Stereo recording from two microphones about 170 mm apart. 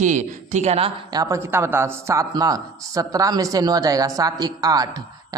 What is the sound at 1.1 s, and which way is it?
Speech, 15° right (ahead or behind).